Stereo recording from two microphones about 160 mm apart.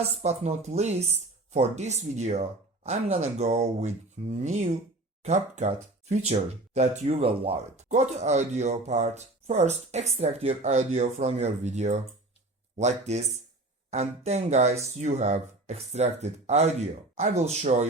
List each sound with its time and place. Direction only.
0.0 s speech: 40° right (ahead or behind)